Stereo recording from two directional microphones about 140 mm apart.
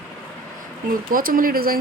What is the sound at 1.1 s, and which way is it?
Speech, 80° right.